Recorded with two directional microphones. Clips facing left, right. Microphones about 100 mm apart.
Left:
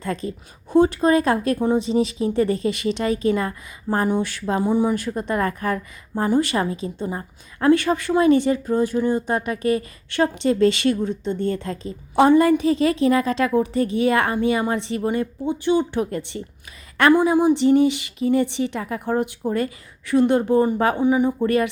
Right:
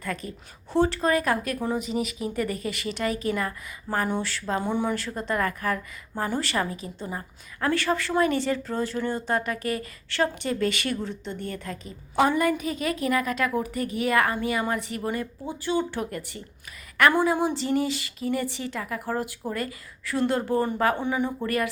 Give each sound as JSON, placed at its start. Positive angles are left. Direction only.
{"t": 0.0, "sound": "speech", "side_deg": 25}
{"t": 17.1, "sound": "speech", "side_deg": 10}